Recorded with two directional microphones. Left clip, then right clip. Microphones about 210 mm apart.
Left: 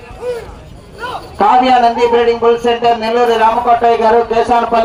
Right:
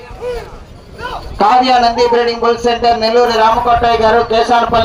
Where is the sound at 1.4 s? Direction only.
40° right (ahead or behind).